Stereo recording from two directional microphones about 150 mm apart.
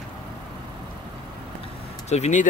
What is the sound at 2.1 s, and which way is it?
Speech, 50° left (ahead or behind).